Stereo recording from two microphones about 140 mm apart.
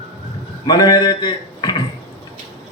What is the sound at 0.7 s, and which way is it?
Speech, 30° left (ahead or behind).